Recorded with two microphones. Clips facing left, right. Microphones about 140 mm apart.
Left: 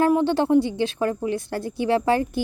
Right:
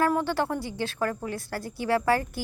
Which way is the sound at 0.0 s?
20° left (ahead or behind).